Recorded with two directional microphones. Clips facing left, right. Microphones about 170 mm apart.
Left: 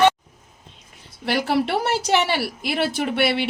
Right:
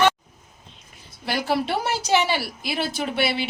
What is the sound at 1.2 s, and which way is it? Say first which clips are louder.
A woman's voice: left 3 dB; 65° left (ahead or behind).